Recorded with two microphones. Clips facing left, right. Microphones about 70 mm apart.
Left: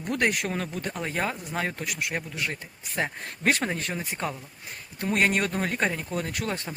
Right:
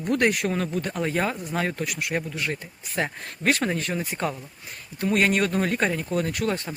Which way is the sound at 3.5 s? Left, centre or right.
Centre.